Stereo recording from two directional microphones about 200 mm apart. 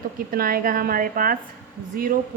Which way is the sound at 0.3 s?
45° right (ahead or behind).